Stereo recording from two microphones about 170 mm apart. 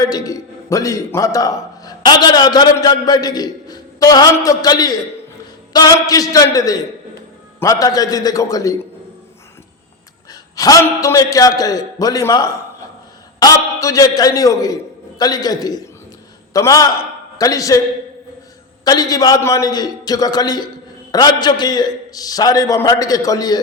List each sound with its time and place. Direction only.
0.0 s a man's voice: 20° left (ahead or behind)
10.5 s a man's voice: 20° left (ahead or behind)
18.9 s a man's voice: 20° left (ahead or behind)